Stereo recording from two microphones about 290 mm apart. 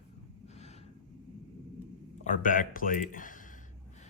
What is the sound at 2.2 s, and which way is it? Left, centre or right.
Speech, left.